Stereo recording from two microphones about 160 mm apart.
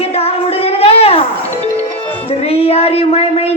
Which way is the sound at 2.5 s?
40° left (ahead or behind).